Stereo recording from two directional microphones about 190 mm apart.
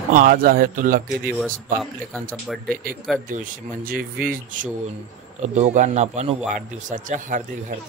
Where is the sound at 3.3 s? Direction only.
45° right (ahead or behind).